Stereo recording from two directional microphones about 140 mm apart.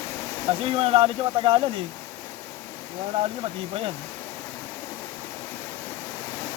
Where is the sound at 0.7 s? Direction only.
40° right (ahead or behind).